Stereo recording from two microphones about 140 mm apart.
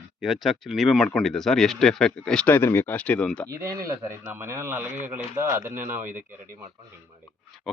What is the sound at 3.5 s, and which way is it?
Speech, 25° right (ahead or behind).